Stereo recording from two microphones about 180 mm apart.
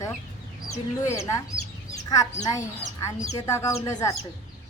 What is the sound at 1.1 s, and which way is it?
Speech, 15° left (ahead or behind).